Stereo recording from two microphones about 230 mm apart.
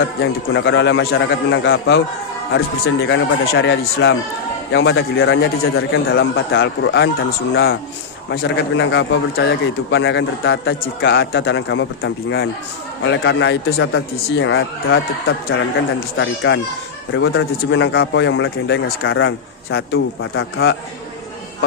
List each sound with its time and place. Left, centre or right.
0.2 s a man's voice: left
16.1 s a man's voice: left